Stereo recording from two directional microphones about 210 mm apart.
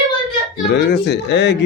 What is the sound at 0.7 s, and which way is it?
Speech, 50° left (ahead or behind).